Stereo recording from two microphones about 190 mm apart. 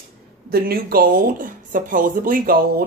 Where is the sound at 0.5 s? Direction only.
50° right (ahead or behind).